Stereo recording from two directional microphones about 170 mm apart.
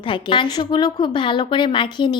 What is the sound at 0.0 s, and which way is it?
A woman's voice, 30° left (ahead or behind).